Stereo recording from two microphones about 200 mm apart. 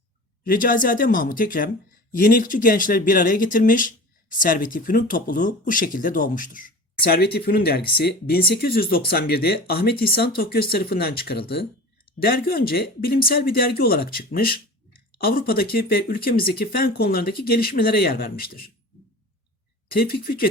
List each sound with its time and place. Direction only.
0.4 s speech: 45° left (ahead or behind)
19.9 s speech: 50° left (ahead or behind)